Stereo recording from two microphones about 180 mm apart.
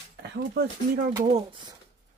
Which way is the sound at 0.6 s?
60° right (ahead or behind).